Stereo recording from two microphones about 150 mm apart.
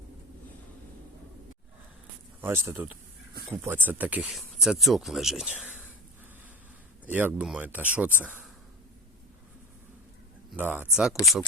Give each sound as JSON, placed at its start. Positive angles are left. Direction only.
{"t": 2.4, "sound": "speech", "side_deg": -15}
{"t": 7.1, "sound": "speech", "side_deg": -10}
{"t": 10.5, "sound": "speech", "side_deg": -10}